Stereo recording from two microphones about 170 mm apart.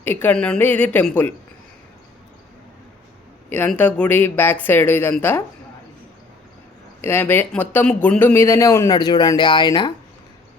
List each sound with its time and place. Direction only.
0.0 s speech: 10° left (ahead or behind)
3.5 s speech: 10° left (ahead or behind)
7.0 s speech: 15° left (ahead or behind)